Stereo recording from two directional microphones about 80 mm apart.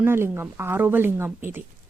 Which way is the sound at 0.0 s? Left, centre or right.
Right.